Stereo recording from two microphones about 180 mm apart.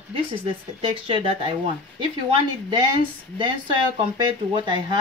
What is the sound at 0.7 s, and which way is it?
Speech, 30° right (ahead or behind).